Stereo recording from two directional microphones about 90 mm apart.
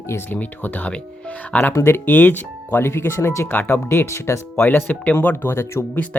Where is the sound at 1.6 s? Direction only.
30° left (ahead or behind).